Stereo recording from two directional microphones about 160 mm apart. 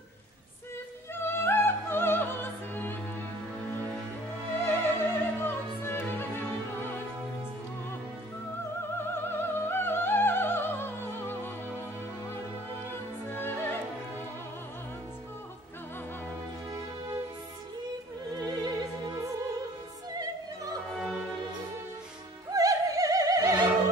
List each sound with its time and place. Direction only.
1.1 s opera: 15° left (ahead or behind)
4.6 s opera: 15° left (ahead or behind)
9.0 s opera: 15° left (ahead or behind)
13.3 s music: 15° left (ahead or behind)
18.4 s music: 25° right (ahead or behind)
22.5 s opera: 20° right (ahead or behind)